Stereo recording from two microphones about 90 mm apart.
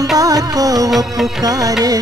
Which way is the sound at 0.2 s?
45° right (ahead or behind).